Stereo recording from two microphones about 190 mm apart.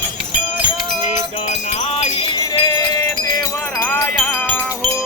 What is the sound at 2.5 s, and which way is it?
Wind chime, 15° left (ahead or behind).